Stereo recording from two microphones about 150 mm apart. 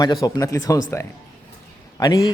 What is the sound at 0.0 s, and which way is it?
Speech, 25° left (ahead or behind).